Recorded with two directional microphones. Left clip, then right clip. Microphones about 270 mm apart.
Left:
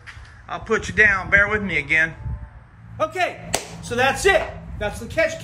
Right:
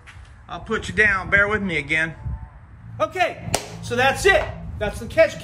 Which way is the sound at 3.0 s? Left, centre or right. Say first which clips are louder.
Right 1 dB; centre.